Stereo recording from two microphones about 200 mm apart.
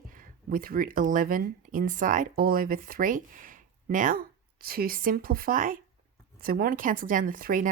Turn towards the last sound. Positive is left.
turn(degrees=-45)  # may be behind; listen again after turning